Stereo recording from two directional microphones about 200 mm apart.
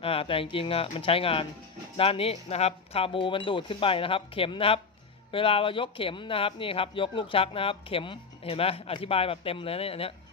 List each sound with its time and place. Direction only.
0.0 s speech: 30° left (ahead or behind)